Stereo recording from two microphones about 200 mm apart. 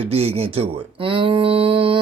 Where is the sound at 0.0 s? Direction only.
30° right (ahead or behind).